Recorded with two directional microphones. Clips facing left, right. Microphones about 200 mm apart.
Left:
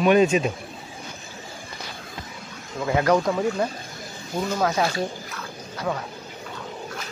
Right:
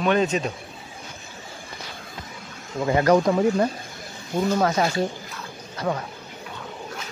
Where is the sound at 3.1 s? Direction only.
15° right (ahead or behind).